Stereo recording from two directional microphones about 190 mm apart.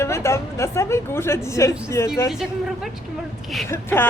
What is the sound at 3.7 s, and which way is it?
Speech, 10° left (ahead or behind).